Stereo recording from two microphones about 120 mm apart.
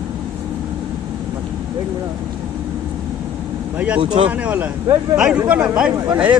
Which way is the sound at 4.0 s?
45° right (ahead or behind).